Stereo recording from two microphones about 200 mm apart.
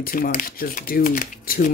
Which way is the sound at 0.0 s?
45° left (ahead or behind).